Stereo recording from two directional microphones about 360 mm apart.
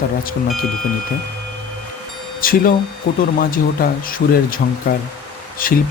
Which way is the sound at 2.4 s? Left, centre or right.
Left.